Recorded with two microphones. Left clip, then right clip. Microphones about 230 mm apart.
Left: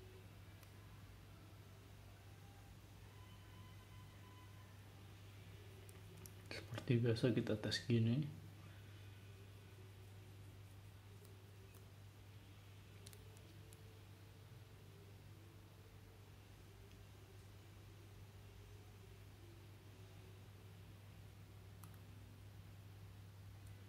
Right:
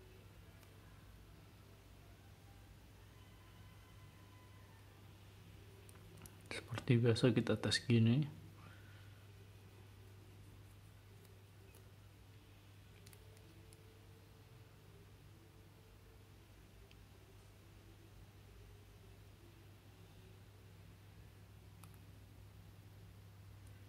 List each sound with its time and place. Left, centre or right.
6.5 s speech: right